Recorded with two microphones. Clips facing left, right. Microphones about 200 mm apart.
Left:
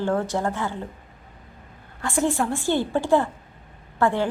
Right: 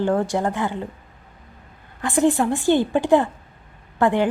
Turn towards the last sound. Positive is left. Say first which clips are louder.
# right 3 dB
turn(degrees=-15)  # may be behind; listen again after turning